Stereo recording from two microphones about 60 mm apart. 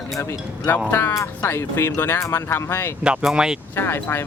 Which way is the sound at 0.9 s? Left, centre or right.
Left.